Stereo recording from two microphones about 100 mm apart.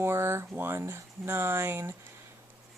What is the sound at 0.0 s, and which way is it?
Speech, 25° right (ahead or behind).